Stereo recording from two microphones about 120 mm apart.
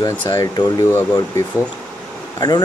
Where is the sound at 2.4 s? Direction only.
35° left (ahead or behind).